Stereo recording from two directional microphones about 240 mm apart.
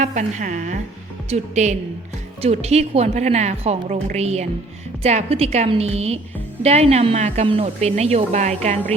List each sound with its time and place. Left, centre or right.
0.0 s a woman's voice: right